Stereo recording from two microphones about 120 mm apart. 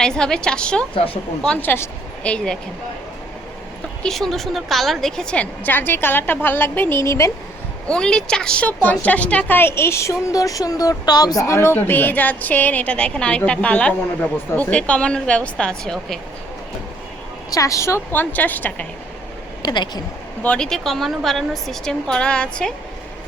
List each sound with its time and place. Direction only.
0.0 s a woman's voice: 5° left (ahead or behind)
0.9 s speech: 50° left (ahead or behind)
1.6 s a woman's voice: 15° left (ahead or behind)
4.0 s a woman's voice: centre (ahead or behind); by 7.3 s 25° left (ahead or behind)
7.9 s a woman's voice: 5° left (ahead or behind); by 11.3 s 35° left (ahead or behind)
11.4 s a woman's voice: 25° left (ahead or behind); by 16.1 s 5° left (ahead or behind)
17.5 s a woman's voice: 30° left (ahead or behind)
19.6 s speech: 35° left (ahead or behind)
20.4 s a woman's voice: 5° left (ahead or behind)